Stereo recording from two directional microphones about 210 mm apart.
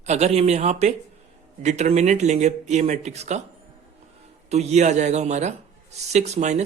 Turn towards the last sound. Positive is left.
turn(degrees=-35)  # may be behind; listen again after turning